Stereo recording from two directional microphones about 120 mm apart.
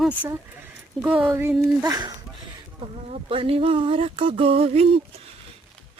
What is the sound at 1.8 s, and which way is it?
Speech, 35° right (ahead or behind).